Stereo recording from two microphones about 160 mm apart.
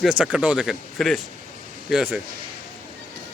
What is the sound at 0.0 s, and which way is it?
Speech, 5° right (ahead or behind).